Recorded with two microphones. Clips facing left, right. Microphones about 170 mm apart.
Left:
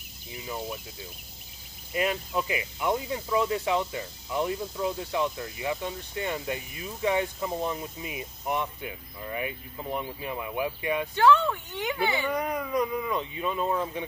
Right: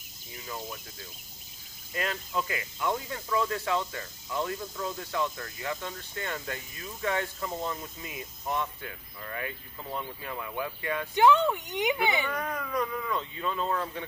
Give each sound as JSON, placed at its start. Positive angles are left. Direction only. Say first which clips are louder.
{"t": 2.0, "sound": "speech", "louder": "left 4 dB", "side_deg": 15}
{"t": 11.1, "sound": "speech", "louder": "even", "side_deg": -15}
{"t": 12.3, "sound": "speech", "louder": "left 4 dB", "side_deg": 15}